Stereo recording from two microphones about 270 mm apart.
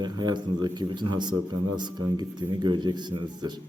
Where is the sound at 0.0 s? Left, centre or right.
Centre.